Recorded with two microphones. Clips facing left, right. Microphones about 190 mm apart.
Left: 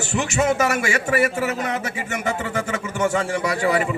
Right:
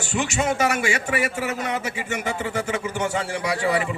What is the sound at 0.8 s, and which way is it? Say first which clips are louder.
A man's voice: left 3 dB; 45° left (ahead or behind).